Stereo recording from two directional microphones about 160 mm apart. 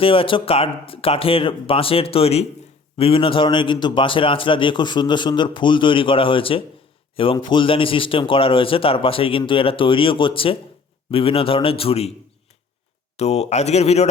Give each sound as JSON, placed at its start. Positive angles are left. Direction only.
{"t": 0.0, "sound": "a man's voice", "side_deg": 35}
{"t": 13.1, "sound": "a man's voice", "side_deg": 40}